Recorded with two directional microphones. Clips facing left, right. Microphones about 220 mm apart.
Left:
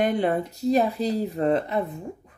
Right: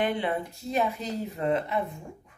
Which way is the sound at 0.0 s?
40° left (ahead or behind).